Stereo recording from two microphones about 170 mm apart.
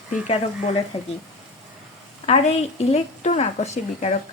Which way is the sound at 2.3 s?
40° left (ahead or behind).